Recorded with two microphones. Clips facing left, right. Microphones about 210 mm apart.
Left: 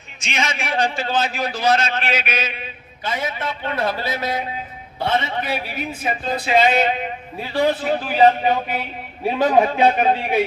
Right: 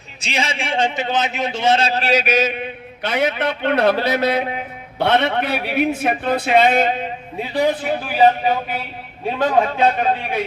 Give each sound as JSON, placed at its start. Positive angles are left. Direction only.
{"t": 0.2, "sound": "a man's voice", "side_deg": -35}
{"t": 3.0, "sound": "a man's voice", "side_deg": -70}
{"t": 7.4, "sound": "a man's voice", "side_deg": -15}
{"t": 9.6, "sound": "a man's voice", "side_deg": 10}